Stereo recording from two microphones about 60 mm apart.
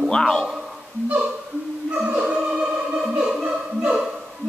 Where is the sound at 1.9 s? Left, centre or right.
Centre.